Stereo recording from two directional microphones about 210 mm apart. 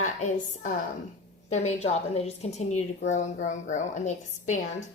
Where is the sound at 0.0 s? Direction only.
35° left (ahead or behind).